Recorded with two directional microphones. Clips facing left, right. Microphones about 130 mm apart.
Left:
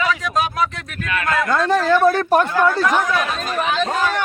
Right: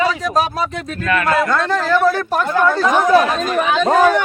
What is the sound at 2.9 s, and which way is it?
Speech, 30° right (ahead or behind).